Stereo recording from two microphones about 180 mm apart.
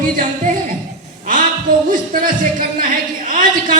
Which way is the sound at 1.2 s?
50° right (ahead or behind).